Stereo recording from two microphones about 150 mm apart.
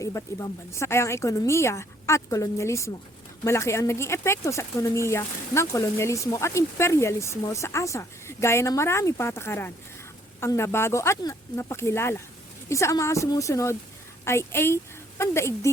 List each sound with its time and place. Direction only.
0.0 s speech: 20° left (ahead or behind)